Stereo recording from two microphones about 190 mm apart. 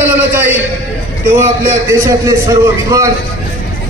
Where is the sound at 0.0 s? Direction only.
10° right (ahead or behind).